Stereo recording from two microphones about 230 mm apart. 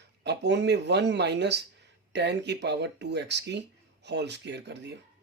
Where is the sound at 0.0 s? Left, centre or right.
Right.